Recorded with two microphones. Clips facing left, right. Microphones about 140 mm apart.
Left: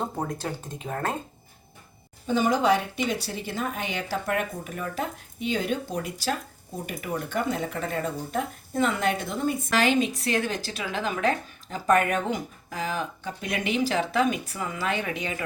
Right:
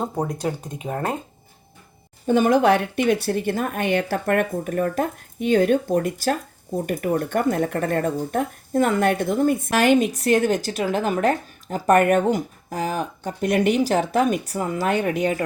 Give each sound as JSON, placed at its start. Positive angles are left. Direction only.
{"t": 0.0, "sound": "speech", "side_deg": -15}
{"t": 2.2, "sound": "speech", "side_deg": -55}
{"t": 12.3, "sound": "speech", "side_deg": -45}